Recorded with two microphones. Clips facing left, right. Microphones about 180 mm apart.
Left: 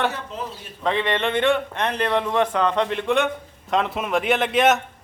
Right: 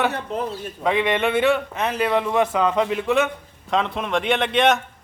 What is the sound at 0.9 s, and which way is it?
A man's voice, 10° right (ahead or behind).